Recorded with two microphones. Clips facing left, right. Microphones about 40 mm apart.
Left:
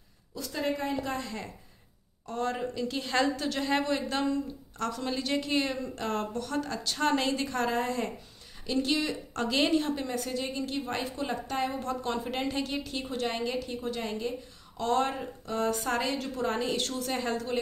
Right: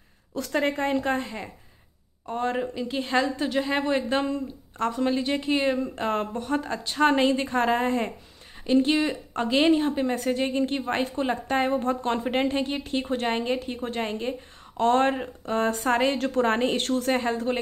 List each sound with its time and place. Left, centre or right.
0.3 s speech: right
1.2 s a woman's voice: right
10.1 s a woman's voice: right